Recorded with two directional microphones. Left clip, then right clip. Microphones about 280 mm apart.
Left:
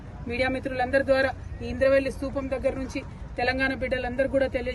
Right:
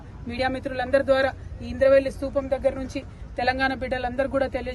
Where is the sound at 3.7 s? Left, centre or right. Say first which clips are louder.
Right 1 dB; right.